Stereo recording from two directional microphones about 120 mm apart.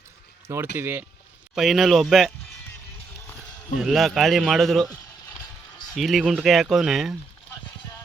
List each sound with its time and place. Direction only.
0.4 s speech: 20° right (ahead or behind)
1.5 s a man's voice: centre (ahead or behind)
3.8 s a man's voice: centre (ahead or behind)